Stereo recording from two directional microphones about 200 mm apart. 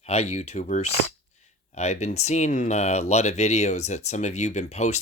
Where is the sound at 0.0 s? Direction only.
30° left (ahead or behind).